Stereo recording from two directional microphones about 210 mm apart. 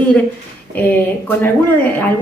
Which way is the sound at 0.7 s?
10° left (ahead or behind).